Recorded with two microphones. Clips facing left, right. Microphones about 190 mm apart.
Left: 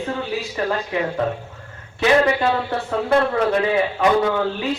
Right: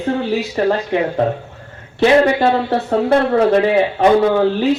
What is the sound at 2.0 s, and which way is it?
A man's voice, 35° right (ahead or behind).